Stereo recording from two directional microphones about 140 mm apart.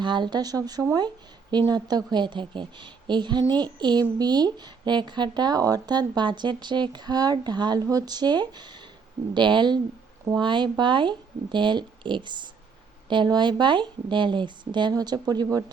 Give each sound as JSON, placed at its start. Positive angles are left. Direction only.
{"t": 0.0, "sound": "speech", "side_deg": -35}